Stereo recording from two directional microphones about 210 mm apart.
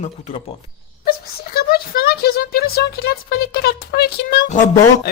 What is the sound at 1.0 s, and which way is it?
Speech, 45° left (ahead or behind).